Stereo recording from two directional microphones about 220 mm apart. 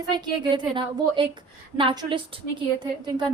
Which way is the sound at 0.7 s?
20° right (ahead or behind).